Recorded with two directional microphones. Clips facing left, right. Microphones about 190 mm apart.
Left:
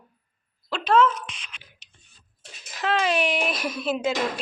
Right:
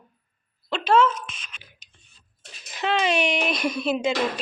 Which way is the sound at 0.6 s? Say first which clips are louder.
Even; centre (ahead or behind).